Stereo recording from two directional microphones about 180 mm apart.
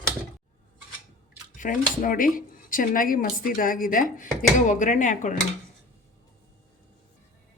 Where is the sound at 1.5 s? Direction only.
45° left (ahead or behind).